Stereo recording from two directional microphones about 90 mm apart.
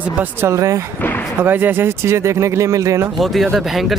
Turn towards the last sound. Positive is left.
turn(degrees=0)  # may be behind; listen again after turning